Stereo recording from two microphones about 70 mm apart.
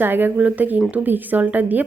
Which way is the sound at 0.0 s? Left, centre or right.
Right.